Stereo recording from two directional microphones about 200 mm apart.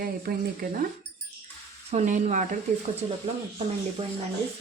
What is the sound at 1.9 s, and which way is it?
Speech, 35° right (ahead or behind).